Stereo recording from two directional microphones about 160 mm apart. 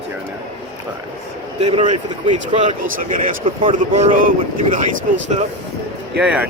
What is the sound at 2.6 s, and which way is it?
Speech, 55° right (ahead or behind).